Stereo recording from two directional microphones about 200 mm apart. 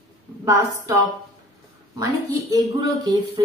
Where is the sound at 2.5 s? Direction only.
20° right (ahead or behind).